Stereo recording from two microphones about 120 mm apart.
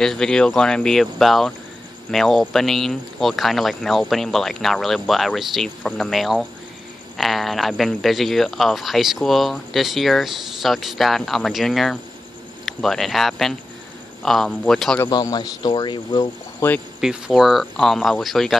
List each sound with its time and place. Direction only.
0.0 s speech: 5° left (ahead or behind)
15.0 s speech: 35° left (ahead or behind)
16.5 s speech: 15° left (ahead or behind)
17.0 s speech: 5° right (ahead or behind)